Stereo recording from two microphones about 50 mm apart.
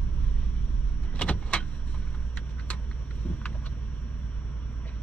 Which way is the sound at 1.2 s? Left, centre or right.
Left.